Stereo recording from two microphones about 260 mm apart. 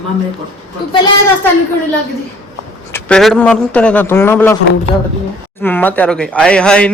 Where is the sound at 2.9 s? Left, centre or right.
Centre.